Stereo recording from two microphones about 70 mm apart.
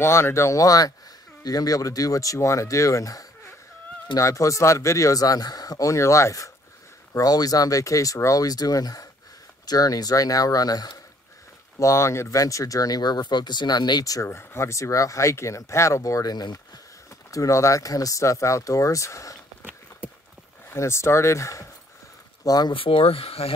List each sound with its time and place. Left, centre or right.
0.0 s speech: left
7.2 s speech: left
11.8 s speech: left
14.2 s speech: left
17.3 s speech: left
20.7 s speech: left
22.4 s speech: left